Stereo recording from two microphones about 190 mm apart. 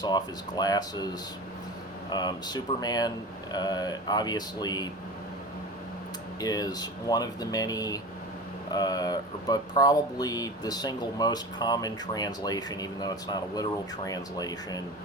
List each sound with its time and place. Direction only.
0.0 s speech: 20° left (ahead or behind)
2.0 s speech: 20° left (ahead or behind)
6.4 s speech: 20° left (ahead or behind)